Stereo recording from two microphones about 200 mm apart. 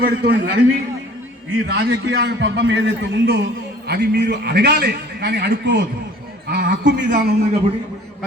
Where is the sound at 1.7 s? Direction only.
55° right (ahead or behind).